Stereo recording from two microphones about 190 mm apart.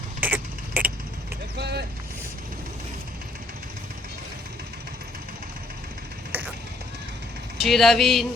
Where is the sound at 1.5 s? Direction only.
60° right (ahead or behind).